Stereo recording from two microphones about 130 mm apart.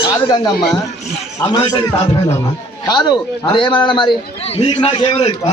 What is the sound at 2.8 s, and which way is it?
A man's voice, 35° left (ahead or behind).